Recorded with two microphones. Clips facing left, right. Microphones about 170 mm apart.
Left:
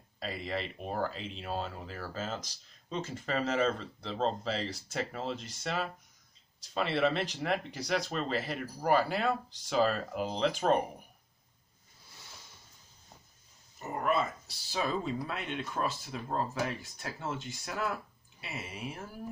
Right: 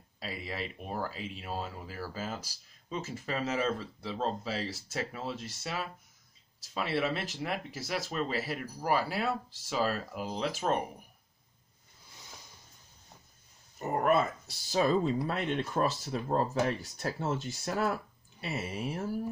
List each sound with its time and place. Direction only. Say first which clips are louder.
0.2 s speech: left 2 dB; 5° right (ahead or behind)
13.7 s speech: right 4 dB; 50° right (ahead or behind)